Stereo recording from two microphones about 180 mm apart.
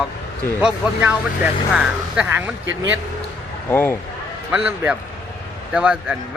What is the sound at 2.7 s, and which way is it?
Speech, 90° right.